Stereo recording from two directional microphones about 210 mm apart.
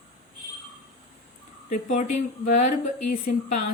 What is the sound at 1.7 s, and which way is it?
A woman's voice, 35° left (ahead or behind).